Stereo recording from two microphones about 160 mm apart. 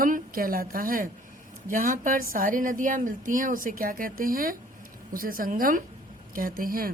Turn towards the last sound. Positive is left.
turn(degrees=-65)  # may be behind; listen again after turning